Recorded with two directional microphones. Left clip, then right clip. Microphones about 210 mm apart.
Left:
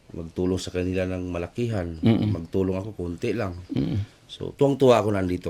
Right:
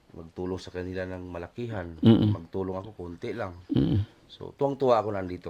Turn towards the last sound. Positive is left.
turn(degrees=35)  # may be behind; listen again after turning